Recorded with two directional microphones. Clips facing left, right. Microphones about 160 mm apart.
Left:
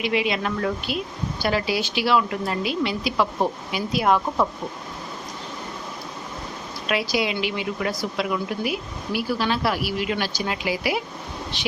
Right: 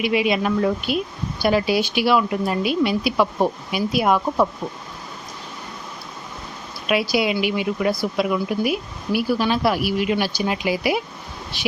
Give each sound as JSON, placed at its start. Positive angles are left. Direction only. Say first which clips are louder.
{"t": 0.0, "sound": "a woman's voice", "louder": "right 4 dB", "side_deg": -15}
{"t": 6.8, "sound": "a woman's voice", "louder": "right 4 dB", "side_deg": -15}